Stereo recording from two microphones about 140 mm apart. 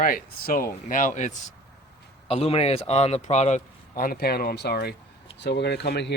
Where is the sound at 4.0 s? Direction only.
90° left.